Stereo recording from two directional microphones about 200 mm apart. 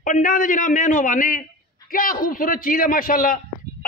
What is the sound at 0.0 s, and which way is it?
A man's voice, 40° left (ahead or behind).